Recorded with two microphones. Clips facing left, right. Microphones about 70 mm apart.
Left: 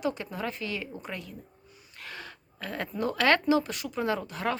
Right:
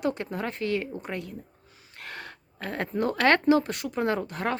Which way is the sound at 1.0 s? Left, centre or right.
Right.